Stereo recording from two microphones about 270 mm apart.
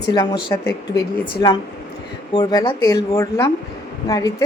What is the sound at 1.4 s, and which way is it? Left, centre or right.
A woman's voice, centre.